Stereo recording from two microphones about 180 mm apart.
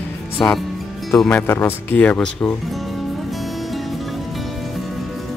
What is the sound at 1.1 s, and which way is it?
Speech, 5° left (ahead or behind).